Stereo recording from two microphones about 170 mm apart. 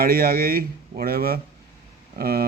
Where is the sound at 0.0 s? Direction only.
60° right (ahead or behind).